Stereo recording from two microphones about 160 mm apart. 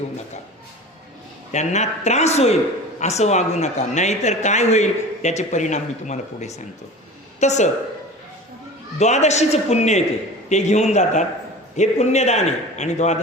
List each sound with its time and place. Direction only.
1.5 s a woman's voice: 45° left (ahead or behind)
9.0 s speech: 45° left (ahead or behind)